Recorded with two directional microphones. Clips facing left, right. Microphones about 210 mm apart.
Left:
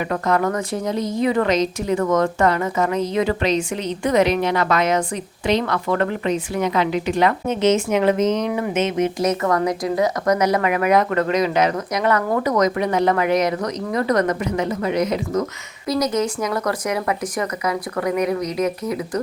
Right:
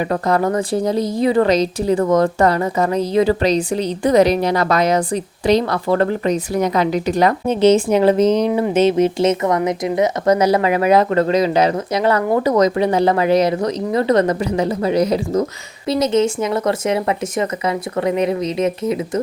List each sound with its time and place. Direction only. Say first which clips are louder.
0.0 s speech: right 3 dB; 35° right (ahead or behind)